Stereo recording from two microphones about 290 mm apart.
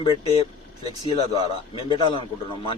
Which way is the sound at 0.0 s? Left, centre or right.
Centre.